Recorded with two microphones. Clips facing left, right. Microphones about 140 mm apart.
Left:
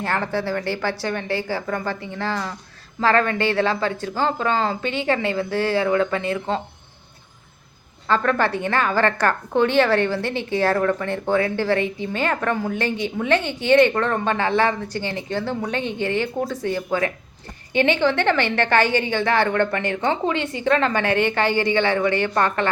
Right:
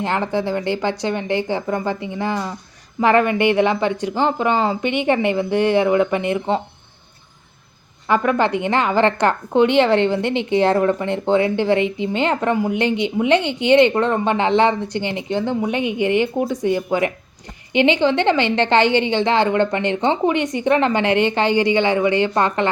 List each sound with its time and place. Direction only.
0.0 s a woman's voice: 20° right (ahead or behind)
8.0 s a woman's voice: 15° right (ahead or behind)